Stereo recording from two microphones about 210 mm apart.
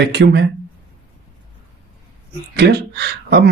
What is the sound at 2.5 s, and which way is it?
Speech, 50° right (ahead or behind).